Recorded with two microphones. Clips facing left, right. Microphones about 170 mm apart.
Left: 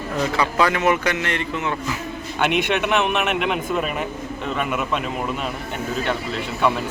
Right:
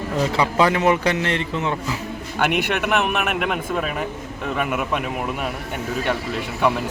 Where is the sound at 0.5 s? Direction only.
25° right (ahead or behind).